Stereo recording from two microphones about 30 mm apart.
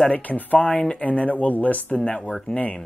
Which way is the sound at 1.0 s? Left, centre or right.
Left.